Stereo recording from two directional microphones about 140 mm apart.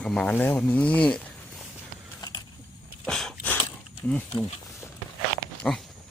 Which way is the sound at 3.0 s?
5° left (ahead or behind).